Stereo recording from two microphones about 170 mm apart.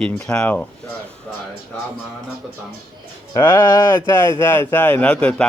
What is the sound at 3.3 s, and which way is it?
Speech, 20° left (ahead or behind).